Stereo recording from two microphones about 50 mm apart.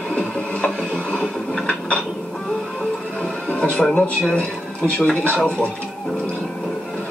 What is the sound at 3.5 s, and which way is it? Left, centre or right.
Music, left.